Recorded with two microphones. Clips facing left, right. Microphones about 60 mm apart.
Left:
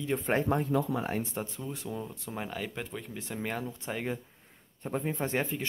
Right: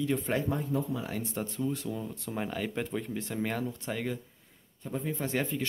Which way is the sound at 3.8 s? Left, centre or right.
Centre.